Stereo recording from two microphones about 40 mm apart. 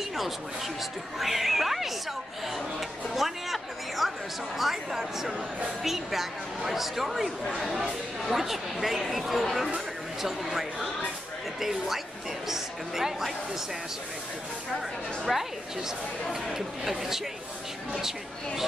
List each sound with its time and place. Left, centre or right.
1.2 s a woman's voice: centre
2.5 s a sound: centre
4.6 s a woman's voice: centre
15.3 s a woman's voice: centre